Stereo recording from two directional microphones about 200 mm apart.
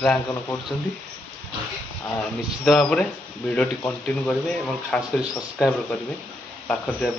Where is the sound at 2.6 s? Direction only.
Centre (ahead or behind).